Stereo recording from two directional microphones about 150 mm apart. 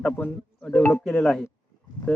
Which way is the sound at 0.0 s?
5° left (ahead or behind).